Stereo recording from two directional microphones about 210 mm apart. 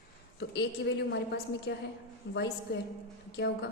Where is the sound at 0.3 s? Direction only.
55° left (ahead or behind).